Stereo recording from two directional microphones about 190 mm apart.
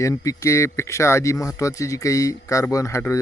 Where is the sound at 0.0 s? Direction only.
15° left (ahead or behind).